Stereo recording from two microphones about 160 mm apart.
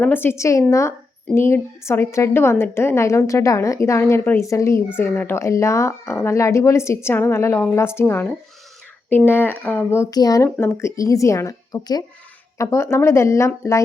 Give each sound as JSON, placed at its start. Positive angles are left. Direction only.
{"t": 0.0, "sound": "a woman's voice", "side_deg": 15}